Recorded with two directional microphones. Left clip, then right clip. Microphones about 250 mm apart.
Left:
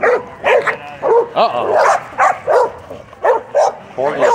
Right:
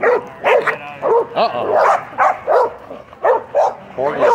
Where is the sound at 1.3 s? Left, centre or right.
Centre.